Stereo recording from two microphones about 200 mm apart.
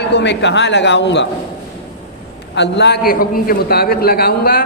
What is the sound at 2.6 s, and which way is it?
A man's voice, 60° left (ahead or behind).